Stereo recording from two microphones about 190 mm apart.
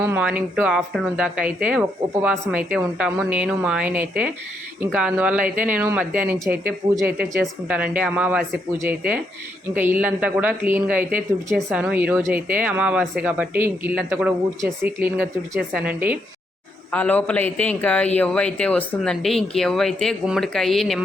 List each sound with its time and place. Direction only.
0.0 s speech: 10° right (ahead or behind)
16.9 s a man's voice: 10° left (ahead or behind)